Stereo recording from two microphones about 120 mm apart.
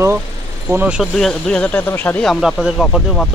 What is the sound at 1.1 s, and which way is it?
Speech, 5° left (ahead or behind).